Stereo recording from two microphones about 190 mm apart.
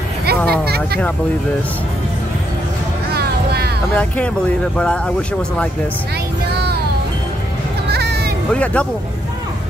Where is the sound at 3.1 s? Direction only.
55° right (ahead or behind).